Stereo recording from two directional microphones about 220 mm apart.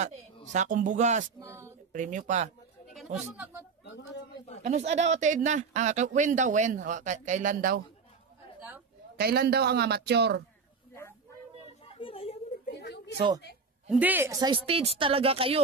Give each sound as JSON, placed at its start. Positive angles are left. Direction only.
{"t": 0.5, "sound": "speech", "side_deg": -35}
{"t": 1.4, "sound": "a woman's voice", "side_deg": -15}
{"t": 1.9, "sound": "speech", "side_deg": -35}
{"t": 4.6, "sound": "speech", "side_deg": -30}
{"t": 8.5, "sound": "a sound", "side_deg": -10}
{"t": 9.1, "sound": "a man's voice", "side_deg": -45}
{"t": 11.9, "sound": "children playing", "side_deg": 25}
{"t": 12.7, "sound": "a sound", "side_deg": 50}
{"t": 13.8, "sound": "speech", "side_deg": -5}